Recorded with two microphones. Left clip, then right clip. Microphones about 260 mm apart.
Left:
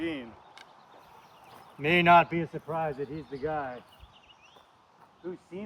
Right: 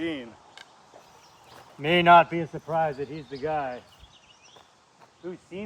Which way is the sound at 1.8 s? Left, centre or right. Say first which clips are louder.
Right 4 dB; centre.